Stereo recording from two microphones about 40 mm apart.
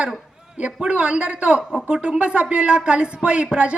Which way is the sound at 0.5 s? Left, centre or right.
Right.